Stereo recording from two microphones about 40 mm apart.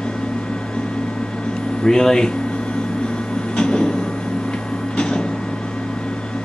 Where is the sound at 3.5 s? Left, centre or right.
Left.